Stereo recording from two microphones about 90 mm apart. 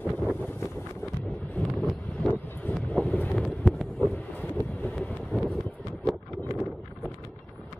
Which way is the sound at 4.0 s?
20° left (ahead or behind).